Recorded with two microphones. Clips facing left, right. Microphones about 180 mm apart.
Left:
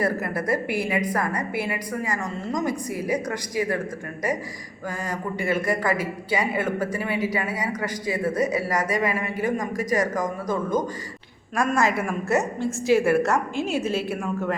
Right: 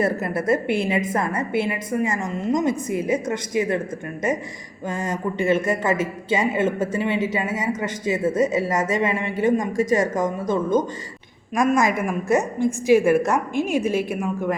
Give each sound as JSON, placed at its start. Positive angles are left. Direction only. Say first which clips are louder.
{"t": 0.0, "sound": "speech", "louder": "right 3 dB", "side_deg": -25}
{"t": 4.9, "sound": "a woman's voice", "louder": "right 4 dB", "side_deg": -25}